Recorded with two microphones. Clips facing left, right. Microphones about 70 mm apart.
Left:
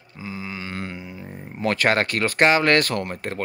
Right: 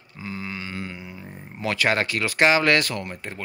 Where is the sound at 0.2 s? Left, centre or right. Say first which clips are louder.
Even; centre.